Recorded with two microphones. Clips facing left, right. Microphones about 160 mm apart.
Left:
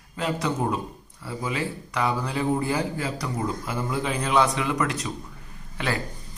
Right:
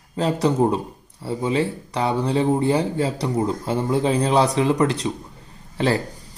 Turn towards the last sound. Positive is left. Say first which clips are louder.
# right 8 dB
turn(degrees=-30)  # may be behind; listen again after turning